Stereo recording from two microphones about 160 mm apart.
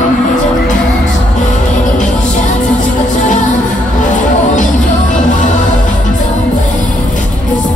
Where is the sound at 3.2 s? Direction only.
50° left (ahead or behind).